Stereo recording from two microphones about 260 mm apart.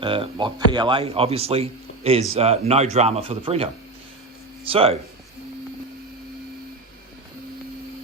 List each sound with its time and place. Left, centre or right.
0.0 s speech: centre